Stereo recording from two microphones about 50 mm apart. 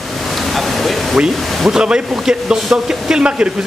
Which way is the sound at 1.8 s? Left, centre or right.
Centre.